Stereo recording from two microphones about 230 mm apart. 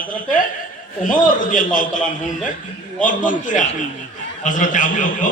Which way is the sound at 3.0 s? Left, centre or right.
Left.